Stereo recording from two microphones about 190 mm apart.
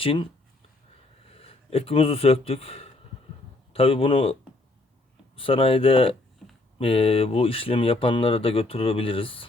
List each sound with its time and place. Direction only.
0.0 s speech: 30° left (ahead or behind)
1.3 s speech: 30° left (ahead or behind)
5.4 s speech: 30° left (ahead or behind)